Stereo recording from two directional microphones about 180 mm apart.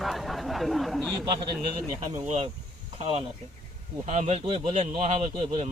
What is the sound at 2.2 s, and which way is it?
Speech, 35° right (ahead or behind).